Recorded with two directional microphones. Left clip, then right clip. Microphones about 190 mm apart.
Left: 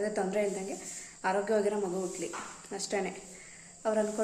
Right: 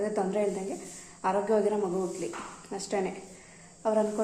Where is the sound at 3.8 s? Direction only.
5° left (ahead or behind).